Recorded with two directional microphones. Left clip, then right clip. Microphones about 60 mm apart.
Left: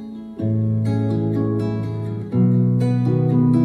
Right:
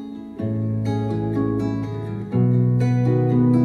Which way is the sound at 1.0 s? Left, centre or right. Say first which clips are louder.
Left 2 dB; left.